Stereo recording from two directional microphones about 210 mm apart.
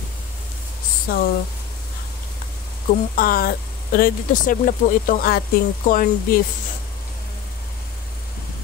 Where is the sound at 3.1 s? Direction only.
45° left (ahead or behind).